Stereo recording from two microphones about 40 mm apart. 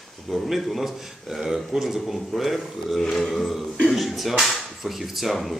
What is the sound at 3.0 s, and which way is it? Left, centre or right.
Speech, centre.